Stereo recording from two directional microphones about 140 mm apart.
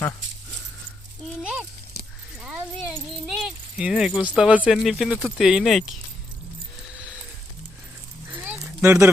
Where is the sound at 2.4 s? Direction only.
10° right (ahead or behind).